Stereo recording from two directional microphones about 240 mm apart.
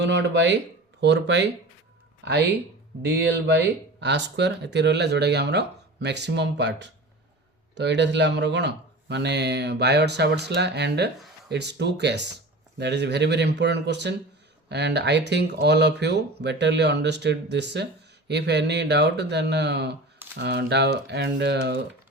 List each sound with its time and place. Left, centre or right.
0.0 s speech: right